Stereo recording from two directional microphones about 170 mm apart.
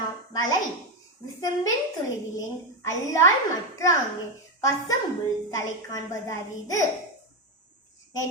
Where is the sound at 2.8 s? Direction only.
15° left (ahead or behind).